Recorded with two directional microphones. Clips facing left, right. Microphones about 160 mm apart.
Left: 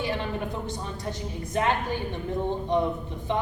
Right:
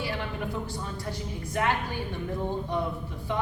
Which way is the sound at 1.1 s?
25° left (ahead or behind).